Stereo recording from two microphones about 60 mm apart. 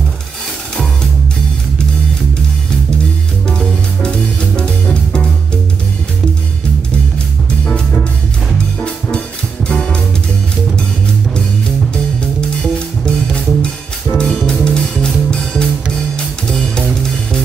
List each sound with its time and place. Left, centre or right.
3.4 s music: centre
8.8 s music: centre
11.9 s music: centre